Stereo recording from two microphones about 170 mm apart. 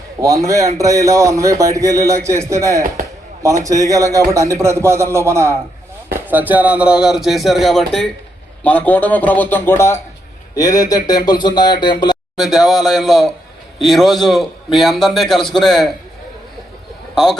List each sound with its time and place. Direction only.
0.2 s a man's voice: 20° right (ahead or behind); by 12.1 s 25° left (ahead or behind)
12.4 s a man's voice: centre (ahead or behind)